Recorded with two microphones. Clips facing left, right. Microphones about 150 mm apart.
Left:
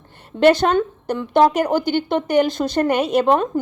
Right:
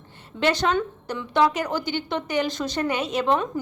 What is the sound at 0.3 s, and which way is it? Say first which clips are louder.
A woman's voice: left 8 dB; 55° left (ahead or behind).